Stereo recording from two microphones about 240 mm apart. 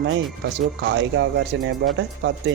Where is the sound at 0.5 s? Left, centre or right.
Right.